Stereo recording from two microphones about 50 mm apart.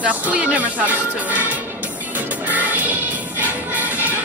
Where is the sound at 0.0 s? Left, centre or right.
Right.